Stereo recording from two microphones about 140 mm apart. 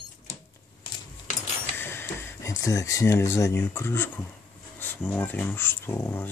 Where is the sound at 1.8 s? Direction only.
15° left (ahead or behind).